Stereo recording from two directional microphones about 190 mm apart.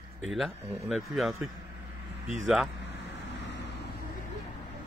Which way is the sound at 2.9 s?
65° left (ahead or behind).